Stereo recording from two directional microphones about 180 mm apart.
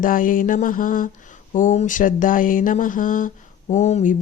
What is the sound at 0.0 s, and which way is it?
Speech, 50° left (ahead or behind).